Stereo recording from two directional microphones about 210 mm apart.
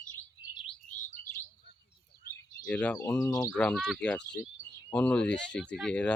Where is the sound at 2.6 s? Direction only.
5° left (ahead or behind).